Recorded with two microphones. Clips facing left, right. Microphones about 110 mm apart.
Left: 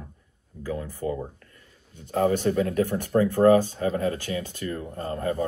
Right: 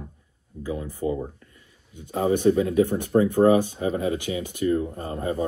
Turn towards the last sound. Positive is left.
turn(degrees=-15)  # may be behind; listen again after turning